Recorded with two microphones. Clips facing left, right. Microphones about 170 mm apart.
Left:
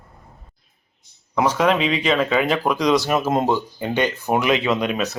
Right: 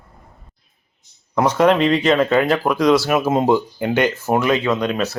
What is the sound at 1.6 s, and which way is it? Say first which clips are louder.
Speech: right 7 dB; 10° left (ahead or behind).